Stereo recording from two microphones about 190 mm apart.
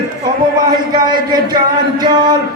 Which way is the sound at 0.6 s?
20° right (ahead or behind).